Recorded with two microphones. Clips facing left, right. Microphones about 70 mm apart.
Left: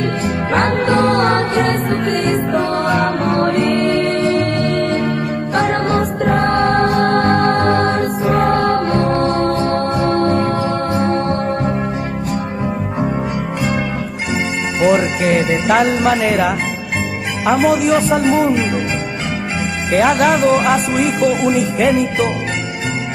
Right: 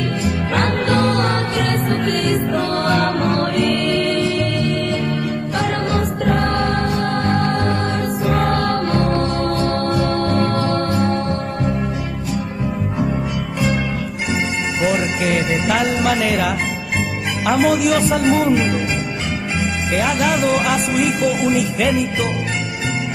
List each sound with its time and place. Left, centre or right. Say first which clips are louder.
0.8 s music: left 4 dB; left
2.7 s music: left 2 dB; centre
3.3 s music: left 3 dB; left
8.3 s music: left 4 dB; centre
8.5 s music: left 3 dB; left
11.0 s music: left 3 dB; left
14.9 s music: left 6 dB; left
16.0 s music: left 3 dB; left
17.5 s speech: left 2 dB; centre
17.8 s music: left 2 dB; left
18.5 s speech: even; centre
20.0 s music: left 6 dB; left